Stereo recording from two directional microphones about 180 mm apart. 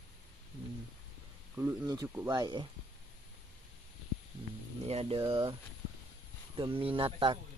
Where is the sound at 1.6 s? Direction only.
15° right (ahead or behind).